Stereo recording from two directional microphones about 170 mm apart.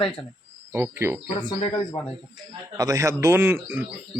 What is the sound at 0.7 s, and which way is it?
Cricket, 15° right (ahead or behind).